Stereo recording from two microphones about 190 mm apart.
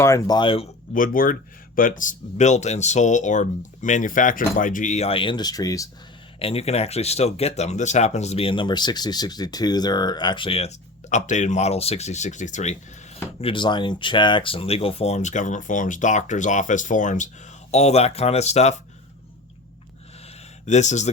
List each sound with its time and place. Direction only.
0.0 s speech: 15° left (ahead or behind)
0.9 s speech: 45° left (ahead or behind); by 5.9 s 20° left (ahead or behind)
6.4 s speech: 30° left (ahead or behind)
13.4 s speech: 25° left (ahead or behind)
20.7 s speech: 40° left (ahead or behind)